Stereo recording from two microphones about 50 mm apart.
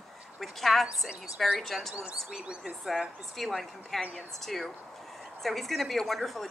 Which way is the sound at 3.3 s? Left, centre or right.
Centre.